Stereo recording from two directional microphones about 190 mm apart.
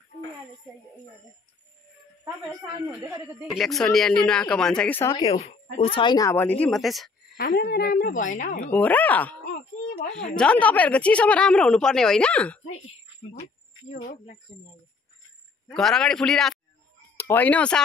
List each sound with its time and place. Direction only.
3.0 s speech: 15° right (ahead or behind)
3.4 s a woman's voice: centre (ahead or behind)
5.1 s speech: 30° left (ahead or behind); by 7.1 s centre (ahead or behind)
7.3 s a woman's voice: 55° left (ahead or behind)
8.6 s speech: 10° left (ahead or behind)
9.5 s wail: 45° left (ahead or behind)
10.3 s a woman's voice: 5° left (ahead or behind)
14.0 s a woman's voice: 40° left (ahead or behind)
15.7 s a woman's voice: centre (ahead or behind)